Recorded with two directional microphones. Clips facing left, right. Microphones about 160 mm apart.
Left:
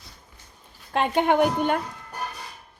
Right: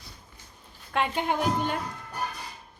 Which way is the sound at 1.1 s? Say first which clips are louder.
Left 10 dB; 60° left (ahead or behind).